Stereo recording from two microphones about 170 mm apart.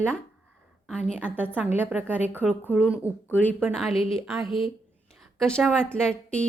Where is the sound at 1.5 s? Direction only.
10° right (ahead or behind).